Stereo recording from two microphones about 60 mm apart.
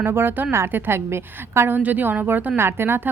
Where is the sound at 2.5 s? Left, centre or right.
Right.